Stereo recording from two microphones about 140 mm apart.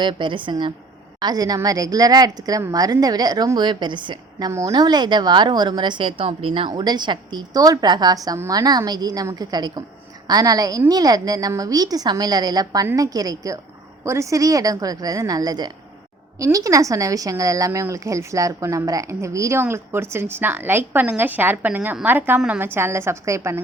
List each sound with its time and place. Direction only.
0.0 s a woman's voice: 35° right (ahead or behind)